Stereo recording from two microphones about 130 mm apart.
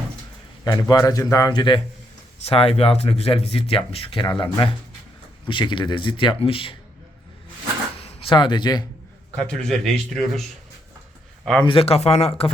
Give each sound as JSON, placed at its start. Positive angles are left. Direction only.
{"t": 0.6, "sound": "a man's voice", "side_deg": 30}
{"t": 2.4, "sound": "speech", "side_deg": 50}
{"t": 8.2, "sound": "speech", "side_deg": 40}
{"t": 9.3, "sound": "a man's voice", "side_deg": 10}
{"t": 11.6, "sound": "speech", "side_deg": 45}